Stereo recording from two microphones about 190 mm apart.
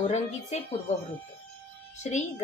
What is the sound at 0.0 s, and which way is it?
Speech, 35° left (ahead or behind).